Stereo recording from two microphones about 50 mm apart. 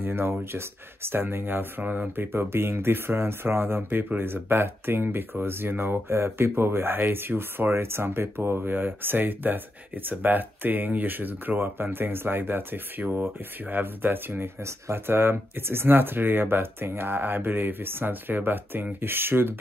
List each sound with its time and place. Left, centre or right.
0.0 s speech: right